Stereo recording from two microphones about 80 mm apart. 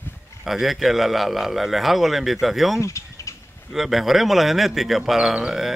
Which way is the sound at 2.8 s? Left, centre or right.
Left.